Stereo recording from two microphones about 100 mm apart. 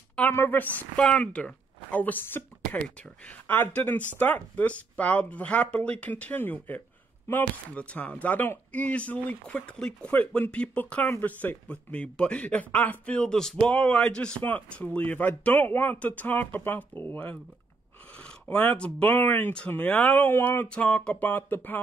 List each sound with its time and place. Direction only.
0.1 s speech: 15° left (ahead or behind)
20.6 s speech: 10° left (ahead or behind)